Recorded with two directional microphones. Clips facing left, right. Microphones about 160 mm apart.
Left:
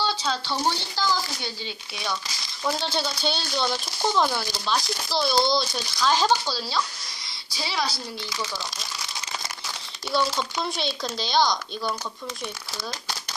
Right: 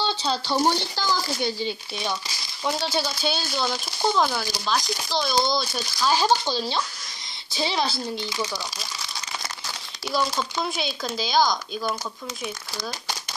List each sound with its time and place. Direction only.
0.0 s speech: 30° right (ahead or behind)
0.7 s speech: 50° right (ahead or behind)
2.6 s speech: 5° right (ahead or behind)
6.4 s speech: 20° right (ahead or behind)
10.1 s speech: 5° right (ahead or behind)